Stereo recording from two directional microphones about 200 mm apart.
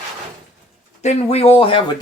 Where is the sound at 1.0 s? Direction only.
35° left (ahead or behind).